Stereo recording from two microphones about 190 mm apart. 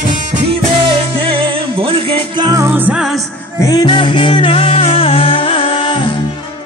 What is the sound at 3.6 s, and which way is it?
Music, 20° left (ahead or behind).